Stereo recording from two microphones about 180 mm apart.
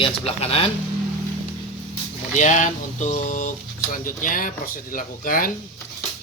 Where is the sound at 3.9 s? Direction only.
50° left (ahead or behind).